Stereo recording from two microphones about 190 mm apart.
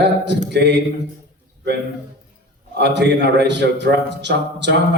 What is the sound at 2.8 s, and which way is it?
A man's voice, 65° right (ahead or behind).